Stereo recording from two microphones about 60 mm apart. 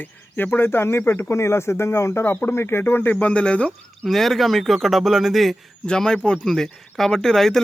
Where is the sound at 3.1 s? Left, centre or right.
Centre.